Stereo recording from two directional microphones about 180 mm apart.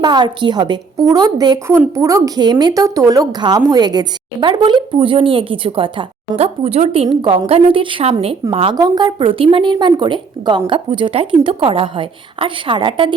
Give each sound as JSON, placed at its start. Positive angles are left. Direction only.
{"t": 0.0, "sound": "a woman's voice", "side_deg": -25}